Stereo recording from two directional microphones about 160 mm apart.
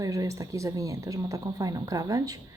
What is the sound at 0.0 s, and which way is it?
Speech, 20° right (ahead or behind).